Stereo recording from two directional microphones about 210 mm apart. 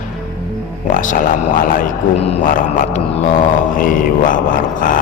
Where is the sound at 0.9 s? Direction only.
40° left (ahead or behind).